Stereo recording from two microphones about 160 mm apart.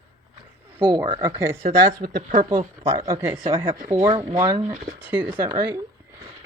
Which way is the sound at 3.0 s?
20° right (ahead or behind).